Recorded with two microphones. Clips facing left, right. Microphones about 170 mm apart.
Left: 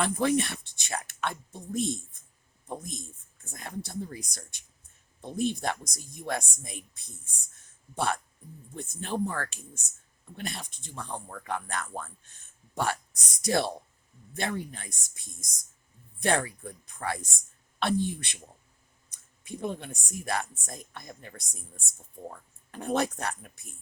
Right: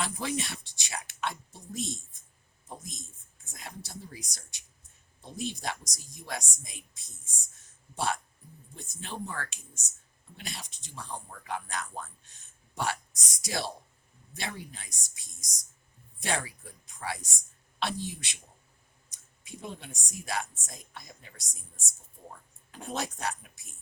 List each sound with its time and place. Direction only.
0.0 s speech: 55° left (ahead or behind)